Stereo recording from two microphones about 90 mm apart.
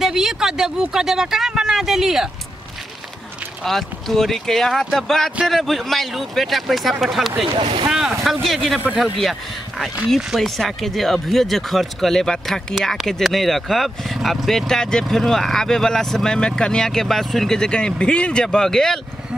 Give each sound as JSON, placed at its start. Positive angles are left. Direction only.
{"t": 0.0, "sound": "speech", "side_deg": -5}
{"t": 3.6, "sound": "speech", "side_deg": 5}
{"t": 7.4, "sound": "speech", "side_deg": -80}
{"t": 7.9, "sound": "speech", "side_deg": -5}